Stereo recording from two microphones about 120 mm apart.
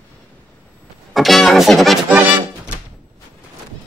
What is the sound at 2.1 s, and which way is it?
Music, 15° right (ahead or behind).